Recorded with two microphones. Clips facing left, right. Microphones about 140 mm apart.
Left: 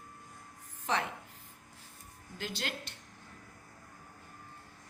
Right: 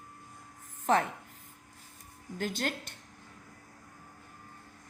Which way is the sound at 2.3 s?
45° right (ahead or behind).